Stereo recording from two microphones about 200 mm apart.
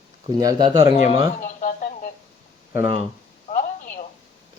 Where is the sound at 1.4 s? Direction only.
40° left (ahead or behind).